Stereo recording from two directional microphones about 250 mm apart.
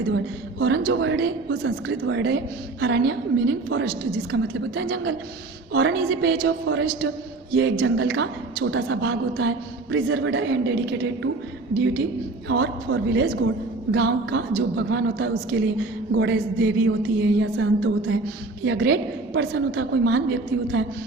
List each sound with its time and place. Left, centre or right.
0.6 s a woman's voice: right
12.5 s a woman's voice: right